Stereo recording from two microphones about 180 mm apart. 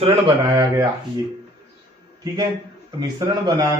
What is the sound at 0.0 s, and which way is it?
Speech, 30° right (ahead or behind).